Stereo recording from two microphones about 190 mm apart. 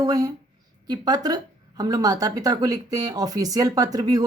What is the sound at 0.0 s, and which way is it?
Speech, 20° right (ahead or behind).